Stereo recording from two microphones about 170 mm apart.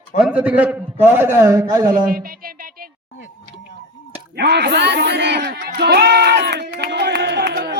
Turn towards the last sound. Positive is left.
turn(degrees=-75)  # may be behind; listen again after turning